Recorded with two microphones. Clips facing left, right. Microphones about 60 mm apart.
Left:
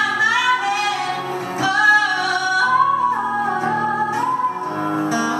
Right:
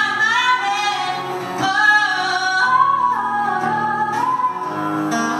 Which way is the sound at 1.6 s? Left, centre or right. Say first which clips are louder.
Even; left.